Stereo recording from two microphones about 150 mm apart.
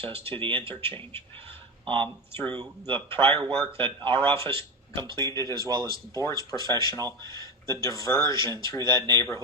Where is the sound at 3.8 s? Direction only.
35° right (ahead or behind).